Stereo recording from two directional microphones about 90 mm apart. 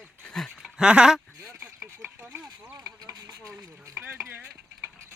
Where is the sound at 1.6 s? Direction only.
25° right (ahead or behind).